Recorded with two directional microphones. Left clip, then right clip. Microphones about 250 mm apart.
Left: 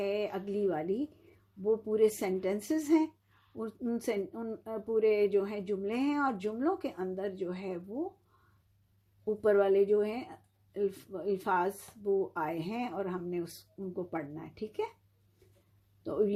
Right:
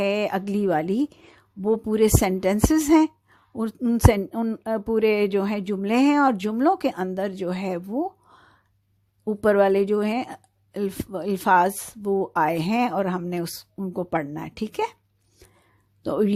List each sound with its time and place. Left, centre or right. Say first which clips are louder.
0.0 s a woman's voice: right 10 dB; right
9.2 s a woman's voice: right 8 dB; right
16.0 s a woman's voice: right 7 dB; right